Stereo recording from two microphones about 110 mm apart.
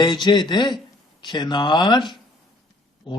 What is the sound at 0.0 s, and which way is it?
Speech, 45° left (ahead or behind).